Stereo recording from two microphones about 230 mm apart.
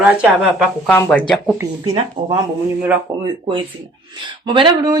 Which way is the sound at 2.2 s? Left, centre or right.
Right.